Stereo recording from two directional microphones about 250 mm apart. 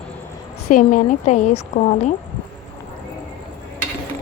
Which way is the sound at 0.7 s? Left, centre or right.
Left.